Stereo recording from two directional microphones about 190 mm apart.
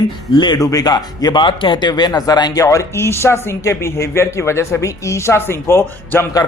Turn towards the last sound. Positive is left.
turn(degrees=15)  # may be behind; listen again after turning